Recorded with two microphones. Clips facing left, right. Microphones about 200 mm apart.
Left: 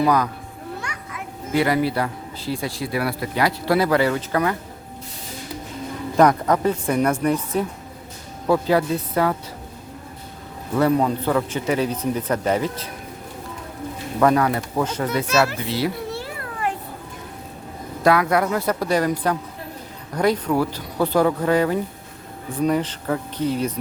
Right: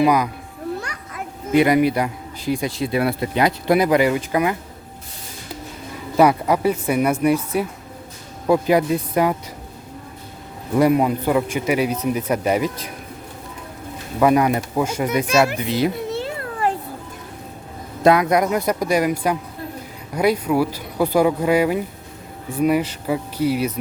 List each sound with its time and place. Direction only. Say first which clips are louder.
0.0 s a man's voice: right 2 dB; 10° right (ahead or behind)
0.8 s children playing: right 1 dB; 35° right (ahead or behind)
1.5 s a man's voice: right 4 dB; 20° right (ahead or behind)
6.1 s a man's voice: right 1 dB; 10° right (ahead or behind)
10.8 s a man's voice: right 2 dB; 10° right (ahead or behind)
14.2 s a man's voice: right 2 dB; 15° right (ahead or behind)
16.6 s a sound: right 4 dB; 35° right (ahead or behind)
18.0 s a man's voice: right 3 dB; 20° right (ahead or behind)